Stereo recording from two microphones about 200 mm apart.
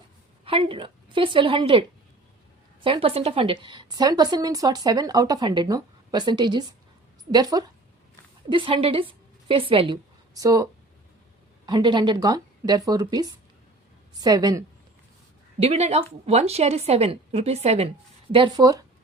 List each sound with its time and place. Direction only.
0.4 s a woman's voice: 25° right (ahead or behind)
2.8 s a woman's voice: 25° right (ahead or behind)
15.5 s a woman's voice: 35° right (ahead or behind)